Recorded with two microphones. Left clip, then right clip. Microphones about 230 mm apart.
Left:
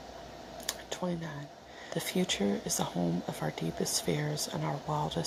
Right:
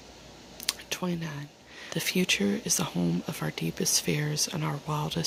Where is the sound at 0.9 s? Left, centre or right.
Right.